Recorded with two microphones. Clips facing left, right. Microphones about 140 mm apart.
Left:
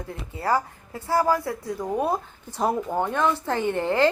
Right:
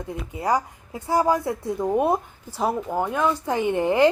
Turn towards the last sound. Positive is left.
turn(degrees=-15)  # may be behind; listen again after turning